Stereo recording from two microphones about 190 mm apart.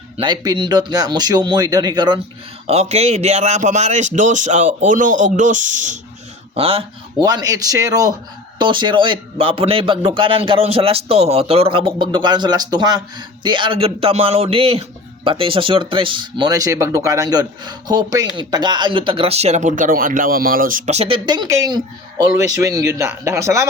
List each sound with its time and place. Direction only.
0.2 s a man's voice: 25° right (ahead or behind)
2.6 s a man's voice: 35° right (ahead or behind); by 23.6 s 15° right (ahead or behind)